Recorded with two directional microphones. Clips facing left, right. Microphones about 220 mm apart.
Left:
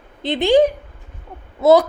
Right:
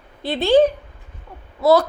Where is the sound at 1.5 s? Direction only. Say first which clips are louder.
Left 3 dB; 20° left (ahead or behind).